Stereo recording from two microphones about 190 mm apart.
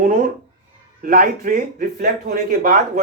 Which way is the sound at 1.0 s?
45° right (ahead or behind).